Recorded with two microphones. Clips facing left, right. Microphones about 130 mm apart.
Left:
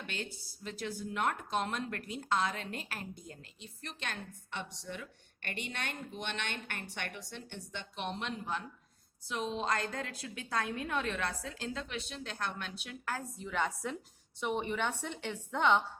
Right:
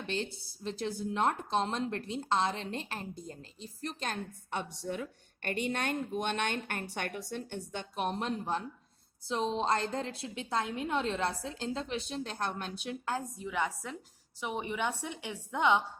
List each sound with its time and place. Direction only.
0.1 s a woman's voice: 30° right (ahead or behind)
13.1 s a woman's voice: 20° right (ahead or behind)
13.5 s a woman's voice: 5° right (ahead or behind)